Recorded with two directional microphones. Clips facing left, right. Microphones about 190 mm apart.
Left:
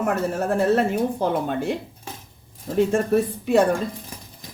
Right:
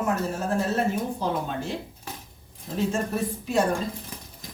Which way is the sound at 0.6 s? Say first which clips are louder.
Left 7 dB; 60° left (ahead or behind).